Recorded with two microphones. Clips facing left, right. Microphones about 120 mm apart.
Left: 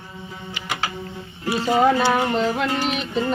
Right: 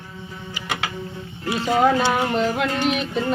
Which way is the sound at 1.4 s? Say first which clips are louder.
Left 1 dB; 5° left (ahead or behind).